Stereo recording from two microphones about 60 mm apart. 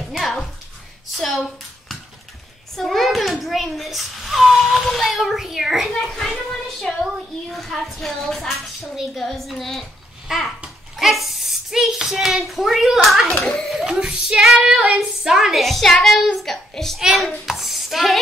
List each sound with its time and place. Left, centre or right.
0.0 s a sound: centre
1.1 s speech: centre
2.7 s a child's voice: centre
14.7 s child singing: right
15.0 s a woman's voice: centre
17.5 s a sound: centre